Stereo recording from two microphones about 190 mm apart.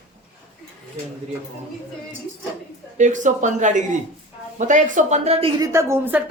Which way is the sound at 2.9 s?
40° right (ahead or behind).